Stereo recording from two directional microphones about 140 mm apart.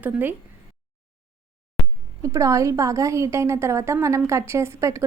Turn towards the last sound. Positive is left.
turn(degrees=-20)  # may be behind; listen again after turning